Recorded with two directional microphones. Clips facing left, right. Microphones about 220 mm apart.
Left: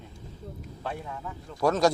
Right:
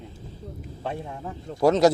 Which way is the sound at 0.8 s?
25° right (ahead or behind).